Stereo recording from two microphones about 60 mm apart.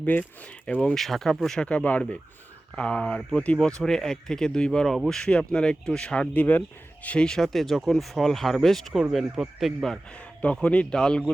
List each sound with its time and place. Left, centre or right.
0.0 s speech: left
0.4 s speech: centre
0.9 s speech: centre
1.6 s speech: left
3.6 s speech: centre
7.3 s speech: centre
9.3 s speech: centre
10.2 s speech: left